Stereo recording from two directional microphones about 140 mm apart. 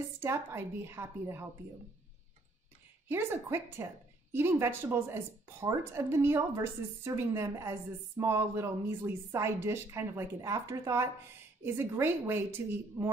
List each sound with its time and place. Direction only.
0.2 s a woman's voice: 20° right (ahead or behind)
3.1 s a woman's voice: 15° right (ahead or behind)